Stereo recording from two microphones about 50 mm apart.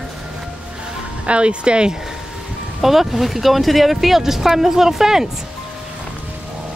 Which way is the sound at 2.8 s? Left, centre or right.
Centre.